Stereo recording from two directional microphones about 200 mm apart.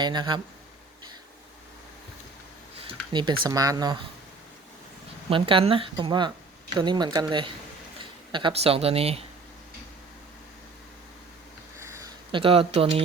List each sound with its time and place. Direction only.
0.0 s speech: 20° right (ahead or behind)
2.7 s a sound: 25° right (ahead or behind)
3.5 s speech: 15° right (ahead or behind)
5.3 s speech: 25° right (ahead or behind)
11.8 s a sound: 15° right (ahead or behind)
12.3 s speech: 25° right (ahead or behind)